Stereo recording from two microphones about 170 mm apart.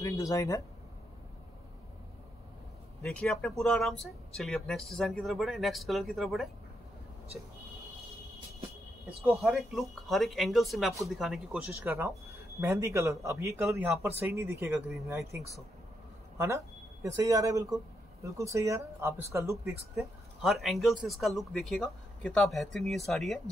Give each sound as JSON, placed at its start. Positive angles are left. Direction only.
{"t": 0.0, "sound": "speech", "side_deg": 20}
{"t": 3.0, "sound": "speech", "side_deg": 5}
{"t": 9.4, "sound": "speech", "side_deg": 0}
{"t": 20.0, "sound": "speech", "side_deg": 0}